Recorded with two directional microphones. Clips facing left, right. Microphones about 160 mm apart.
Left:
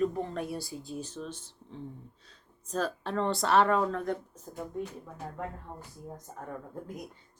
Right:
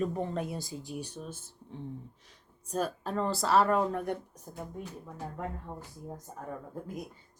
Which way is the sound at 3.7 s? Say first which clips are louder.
Even; 15° right (ahead or behind).